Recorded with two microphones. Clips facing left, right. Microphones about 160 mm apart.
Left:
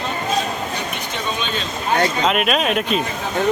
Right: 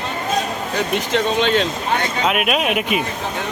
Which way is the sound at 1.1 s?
90° right.